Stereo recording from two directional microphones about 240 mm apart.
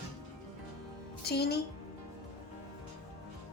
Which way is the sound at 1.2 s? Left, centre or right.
Left.